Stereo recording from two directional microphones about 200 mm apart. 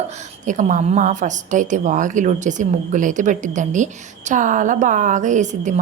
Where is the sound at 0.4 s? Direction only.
40° right (ahead or behind).